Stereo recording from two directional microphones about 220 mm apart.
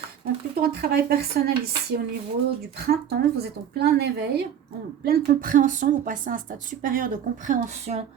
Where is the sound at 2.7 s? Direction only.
45° right (ahead or behind).